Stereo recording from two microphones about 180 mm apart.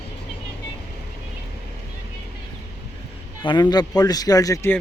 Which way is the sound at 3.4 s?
25° left (ahead or behind).